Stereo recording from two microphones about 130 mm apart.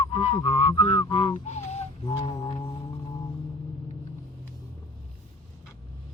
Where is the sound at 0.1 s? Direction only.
50° left (ahead or behind).